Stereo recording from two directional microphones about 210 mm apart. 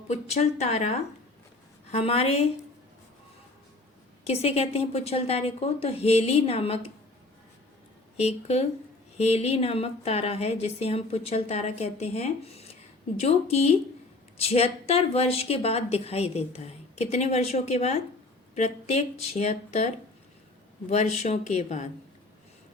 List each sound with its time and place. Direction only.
0.1 s a woman's voice: 30° left (ahead or behind)
4.3 s a woman's voice: 30° left (ahead or behind)
8.1 s a woman's voice: 30° left (ahead or behind)
20.9 s speech: 30° left (ahead or behind)